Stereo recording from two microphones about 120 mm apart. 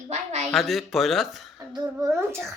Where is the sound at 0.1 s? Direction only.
75° right (ahead or behind).